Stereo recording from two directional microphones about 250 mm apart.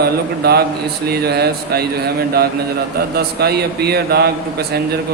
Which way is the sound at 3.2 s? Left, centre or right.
Right.